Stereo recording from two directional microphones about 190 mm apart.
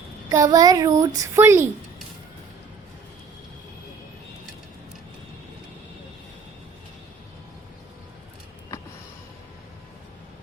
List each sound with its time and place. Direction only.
0.3 s a woman's voice: 20° right (ahead or behind)